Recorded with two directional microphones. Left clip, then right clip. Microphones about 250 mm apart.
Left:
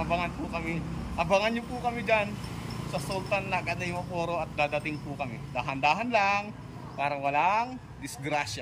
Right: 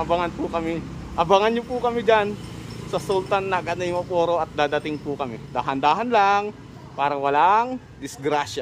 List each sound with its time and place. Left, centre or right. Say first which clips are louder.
0.1 s speech: right 8 dB; centre